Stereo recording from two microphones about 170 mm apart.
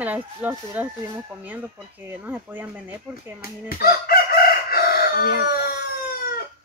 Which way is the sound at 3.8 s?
60° left (ahead or behind).